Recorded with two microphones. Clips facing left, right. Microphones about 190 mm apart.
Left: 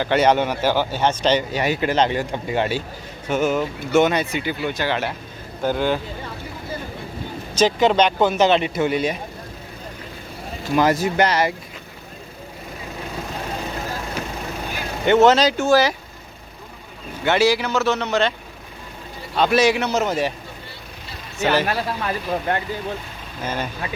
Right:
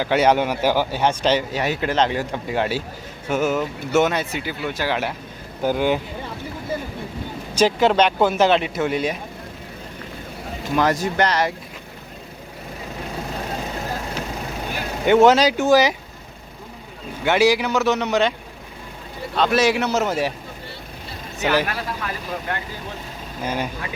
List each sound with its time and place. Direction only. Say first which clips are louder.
0.0 s a man's voice: even; 5° right (ahead or behind)
7.5 s speech: even; 10° right (ahead or behind)
10.8 s speech: left 2 dB; 5° left (ahead or behind)
15.0 s a man's voice: right 1 dB; 10° right (ahead or behind)
17.2 s a man's voice: right 1 dB; 15° right (ahead or behind)
19.4 s speech: left 1 dB; centre (ahead or behind)
21.7 s speech: left 4 dB; 30° left (ahead or behind)
23.4 s a man's voice: right 1 dB; 10° right (ahead or behind)